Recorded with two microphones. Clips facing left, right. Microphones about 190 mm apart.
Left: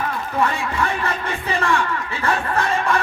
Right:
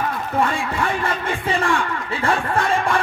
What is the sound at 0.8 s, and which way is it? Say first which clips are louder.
Speech: left 1 dB; 30° right (ahead or behind).